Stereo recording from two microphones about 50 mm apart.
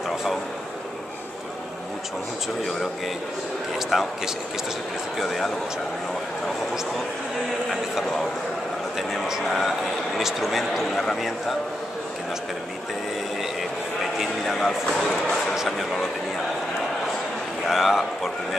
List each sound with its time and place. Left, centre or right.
3.9 s a man's voice: centre
5.2 s a man's voice: centre
7.7 s a man's voice: centre
14.4 s a man's voice: centre
15.5 s speech: centre
17.6 s a man's voice: centre